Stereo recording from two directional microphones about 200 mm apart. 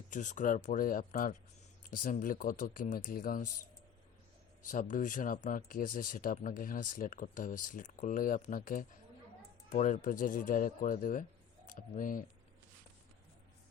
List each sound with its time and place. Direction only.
0.1 s speech: 40° left (ahead or behind)
4.7 s speech: 40° left (ahead or behind)